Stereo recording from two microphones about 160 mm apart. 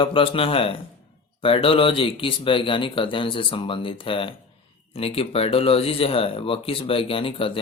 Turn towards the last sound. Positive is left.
turn(degrees=35)  # may be behind; listen again after turning